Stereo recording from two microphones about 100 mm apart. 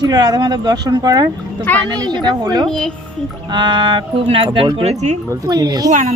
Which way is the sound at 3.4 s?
50° right (ahead or behind).